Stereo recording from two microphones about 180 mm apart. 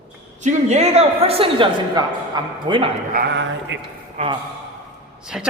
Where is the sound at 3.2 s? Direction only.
90° right.